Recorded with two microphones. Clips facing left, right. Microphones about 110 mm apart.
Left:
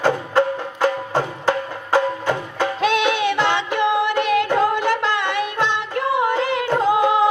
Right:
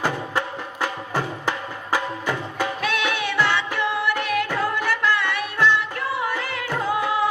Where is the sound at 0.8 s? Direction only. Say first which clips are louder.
Left 6 dB; 20° left (ahead or behind).